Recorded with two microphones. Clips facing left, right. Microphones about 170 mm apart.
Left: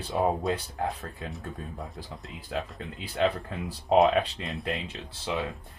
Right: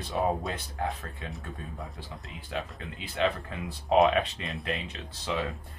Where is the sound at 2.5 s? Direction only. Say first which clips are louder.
Left 2 dB; 35° left (ahead or behind).